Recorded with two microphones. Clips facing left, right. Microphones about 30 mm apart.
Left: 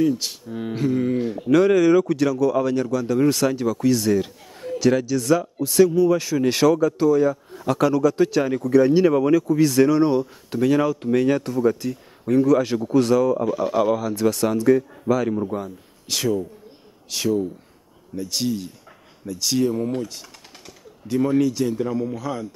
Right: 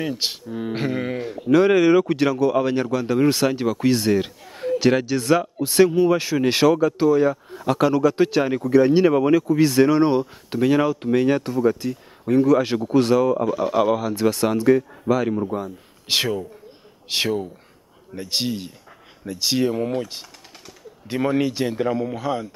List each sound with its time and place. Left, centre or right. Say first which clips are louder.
0.0 s speech: left 4 dB; right
13.5 s speech: right 1 dB; centre
13.9 s speech: even; right
21.1 s speech: left 2 dB; right